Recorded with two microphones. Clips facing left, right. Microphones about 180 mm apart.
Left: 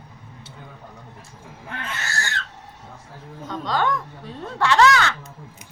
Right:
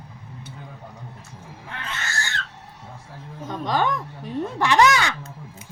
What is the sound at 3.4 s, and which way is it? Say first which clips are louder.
Speech: even; 15° right (ahead or behind).